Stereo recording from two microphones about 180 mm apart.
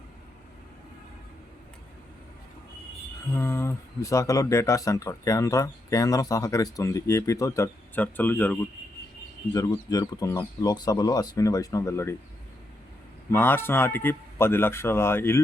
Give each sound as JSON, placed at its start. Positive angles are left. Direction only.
{"t": 3.3, "sound": "speech", "side_deg": 15}
{"t": 9.5, "sound": "speech", "side_deg": 20}
{"t": 13.3, "sound": "speech", "side_deg": 10}